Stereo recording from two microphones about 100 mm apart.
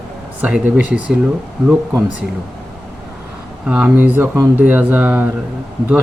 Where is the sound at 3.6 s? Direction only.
15° right (ahead or behind).